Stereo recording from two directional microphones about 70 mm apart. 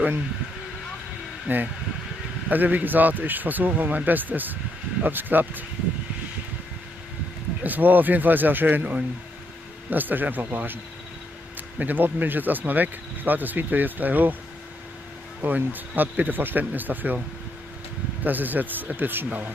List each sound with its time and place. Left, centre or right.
1.5 s speech: right
7.6 s speech: right
11.8 s speech: right
15.4 s speech: right
18.2 s speech: right